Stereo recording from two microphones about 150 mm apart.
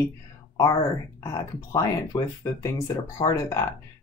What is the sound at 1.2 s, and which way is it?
Speech, 20° left (ahead or behind).